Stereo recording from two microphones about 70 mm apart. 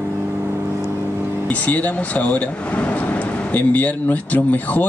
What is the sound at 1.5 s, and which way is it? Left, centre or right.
Speech, left.